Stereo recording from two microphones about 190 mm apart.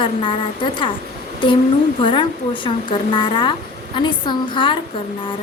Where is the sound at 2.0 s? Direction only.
25° left (ahead or behind).